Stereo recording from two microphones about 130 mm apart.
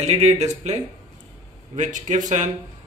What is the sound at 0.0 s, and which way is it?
Speech, 55° right (ahead or behind).